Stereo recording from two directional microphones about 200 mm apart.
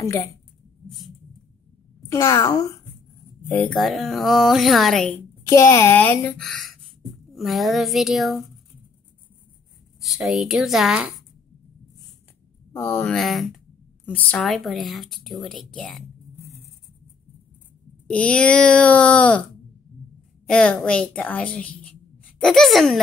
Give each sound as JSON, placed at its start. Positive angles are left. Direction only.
{"t": 0.8, "sound": "a sound", "side_deg": 0}
{"t": 2.0, "sound": "a woman's voice", "side_deg": 15}
{"t": 9.9, "sound": "a woman's voice", "side_deg": 0}
{"t": 12.7, "sound": "a woman's voice", "side_deg": 10}
{"t": 18.0, "sound": "a woman's voice", "side_deg": 5}
{"t": 20.4, "sound": "a woman's voice", "side_deg": 5}